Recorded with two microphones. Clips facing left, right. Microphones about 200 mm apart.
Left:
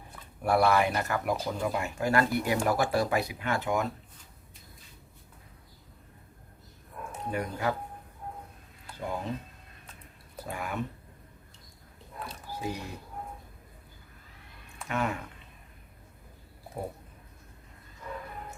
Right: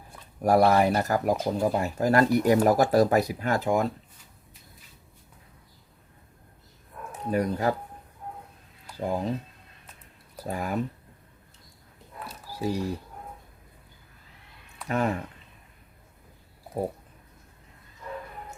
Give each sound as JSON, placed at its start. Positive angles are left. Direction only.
{"t": 0.4, "sound": "speech", "side_deg": -40}
{"t": 7.3, "sound": "speech", "side_deg": -40}
{"t": 9.0, "sound": "speech", "side_deg": -35}
{"t": 10.3, "sound": "speech", "side_deg": -40}
{"t": 12.5, "sound": "a sound", "side_deg": -35}
{"t": 14.8, "sound": "speech", "side_deg": -35}